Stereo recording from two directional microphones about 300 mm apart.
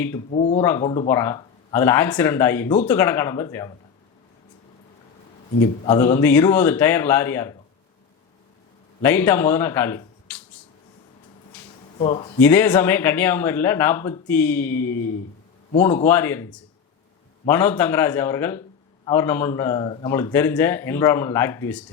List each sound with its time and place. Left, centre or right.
0.3 s speech: left
5.8 s speech: centre
9.0 s speech: centre
11.9 s speech: centre
12.4 s speech: centre